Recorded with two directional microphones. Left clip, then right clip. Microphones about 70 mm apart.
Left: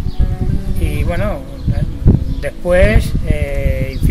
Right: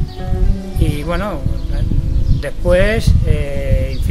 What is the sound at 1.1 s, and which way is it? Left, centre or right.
Speech, right.